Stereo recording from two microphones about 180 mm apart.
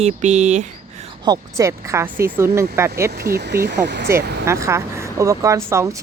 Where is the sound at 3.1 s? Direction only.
60° right (ahead or behind).